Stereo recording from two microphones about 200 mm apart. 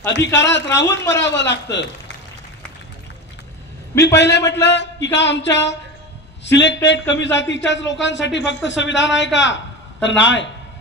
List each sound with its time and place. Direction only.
0.4 s a man's voice: 60° left (ahead or behind)
4.0 s a man's voice: 60° left (ahead or behind)